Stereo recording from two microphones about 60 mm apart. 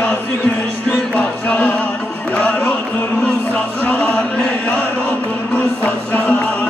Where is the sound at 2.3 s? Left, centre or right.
Left.